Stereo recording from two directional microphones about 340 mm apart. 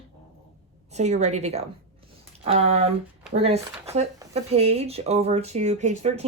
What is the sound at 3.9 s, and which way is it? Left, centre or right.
Speech, centre.